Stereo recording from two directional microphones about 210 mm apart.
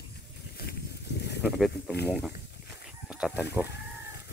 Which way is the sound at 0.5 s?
50° left (ahead or behind).